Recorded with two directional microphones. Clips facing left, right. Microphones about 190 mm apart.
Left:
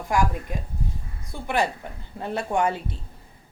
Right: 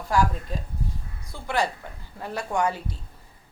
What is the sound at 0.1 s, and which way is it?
A man's voice, 15° left (ahead or behind).